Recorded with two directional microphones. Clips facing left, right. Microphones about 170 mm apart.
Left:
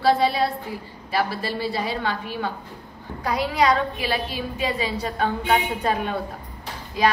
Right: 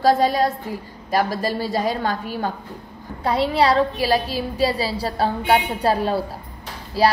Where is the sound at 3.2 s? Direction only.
30° right (ahead or behind).